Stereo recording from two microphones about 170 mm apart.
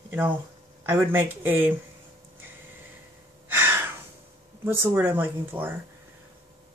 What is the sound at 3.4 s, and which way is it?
Gasp, 15° right (ahead or behind).